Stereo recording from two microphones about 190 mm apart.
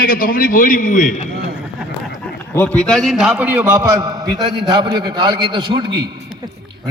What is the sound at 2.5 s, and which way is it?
A man's voice, 5° left (ahead or behind).